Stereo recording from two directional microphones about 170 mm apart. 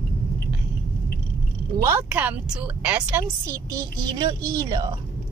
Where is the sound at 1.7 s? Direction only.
15° right (ahead or behind).